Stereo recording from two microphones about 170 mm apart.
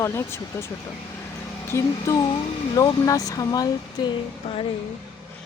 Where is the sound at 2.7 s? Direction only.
20° left (ahead or behind).